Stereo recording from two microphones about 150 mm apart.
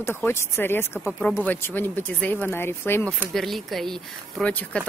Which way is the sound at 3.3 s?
Centre (ahead or behind).